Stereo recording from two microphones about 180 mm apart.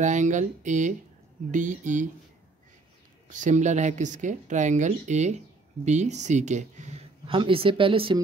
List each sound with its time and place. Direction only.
0.0 s speech: 45° right (ahead or behind)
3.3 s speech: 45° right (ahead or behind)